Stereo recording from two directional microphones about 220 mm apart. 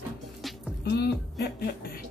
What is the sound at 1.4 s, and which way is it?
Speech, 45° left (ahead or behind).